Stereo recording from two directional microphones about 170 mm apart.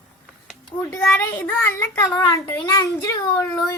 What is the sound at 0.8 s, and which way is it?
A child's voice, 10° left (ahead or behind).